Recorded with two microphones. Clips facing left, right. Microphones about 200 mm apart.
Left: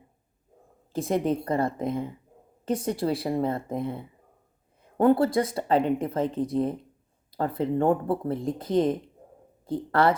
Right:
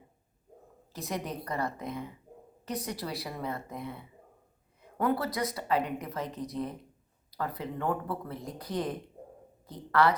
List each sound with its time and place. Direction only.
1.1 s speech: 25° left (ahead or behind)
7.3 s a sound: 30° left (ahead or behind)
7.6 s speech: 30° left (ahead or behind)